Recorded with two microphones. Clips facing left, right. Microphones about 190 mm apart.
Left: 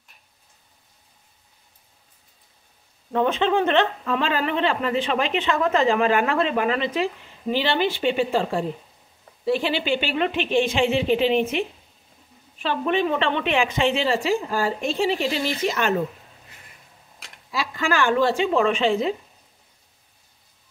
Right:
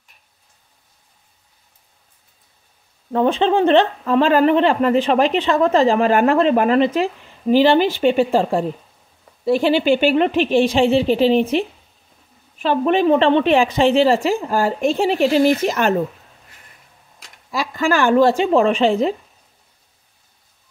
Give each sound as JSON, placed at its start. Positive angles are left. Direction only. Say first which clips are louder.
{"t": 3.1, "sound": "a woman's voice", "louder": "right 4 dB", "side_deg": -35}
{"t": 12.6, "sound": "a woman's voice", "louder": "right 7 dB", "side_deg": -40}
{"t": 17.5, "sound": "a woman's voice", "louder": "right 5 dB", "side_deg": -45}